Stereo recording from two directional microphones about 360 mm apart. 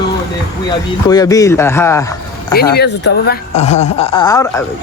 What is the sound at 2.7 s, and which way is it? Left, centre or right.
Speech, left.